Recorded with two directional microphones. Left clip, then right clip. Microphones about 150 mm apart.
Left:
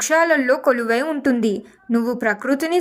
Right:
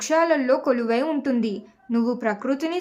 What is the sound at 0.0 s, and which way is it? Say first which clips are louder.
A woman's voice: left 4 dB; 35° left (ahead or behind).